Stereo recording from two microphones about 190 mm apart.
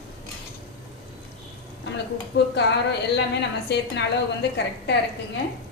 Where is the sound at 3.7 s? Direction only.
65° left (ahead or behind).